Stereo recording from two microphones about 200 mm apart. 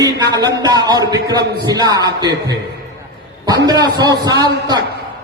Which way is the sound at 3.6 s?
20° right (ahead or behind).